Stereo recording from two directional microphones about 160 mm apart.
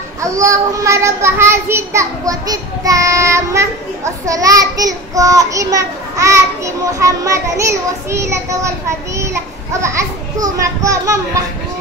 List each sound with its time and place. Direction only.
0.2 s a child's voice: 20° right (ahead or behind)